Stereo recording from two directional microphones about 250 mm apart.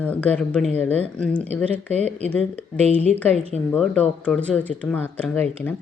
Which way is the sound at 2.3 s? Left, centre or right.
Centre.